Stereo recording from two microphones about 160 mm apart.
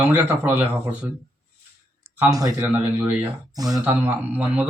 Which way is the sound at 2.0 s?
10° right (ahead or behind).